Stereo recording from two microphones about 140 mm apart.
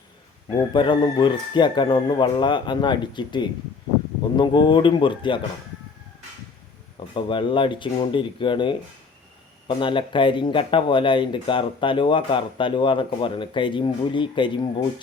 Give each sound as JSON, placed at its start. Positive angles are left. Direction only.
{"t": 0.7, "sound": "speech", "side_deg": 35}
{"t": 6.9, "sound": "speech", "side_deg": 35}